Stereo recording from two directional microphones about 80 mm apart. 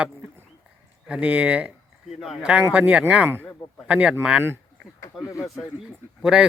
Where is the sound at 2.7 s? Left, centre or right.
Centre.